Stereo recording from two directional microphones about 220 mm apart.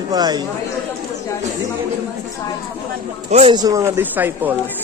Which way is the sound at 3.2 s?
30° right (ahead or behind).